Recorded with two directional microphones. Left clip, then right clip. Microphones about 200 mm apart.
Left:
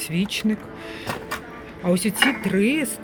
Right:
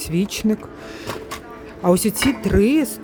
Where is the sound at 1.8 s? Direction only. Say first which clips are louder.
Right 2 dB; 35° right (ahead or behind).